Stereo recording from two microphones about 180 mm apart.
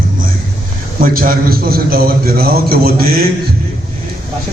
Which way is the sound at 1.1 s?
55° right (ahead or behind).